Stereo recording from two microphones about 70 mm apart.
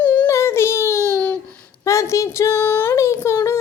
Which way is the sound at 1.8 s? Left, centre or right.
Left.